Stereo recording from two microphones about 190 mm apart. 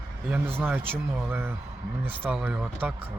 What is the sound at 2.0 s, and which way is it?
Speech, 30° right (ahead or behind).